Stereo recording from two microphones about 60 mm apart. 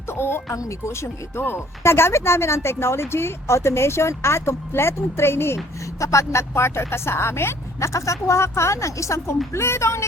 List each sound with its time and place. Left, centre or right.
0.1 s speech: left
6.0 s speech: left
6.5 s speech: left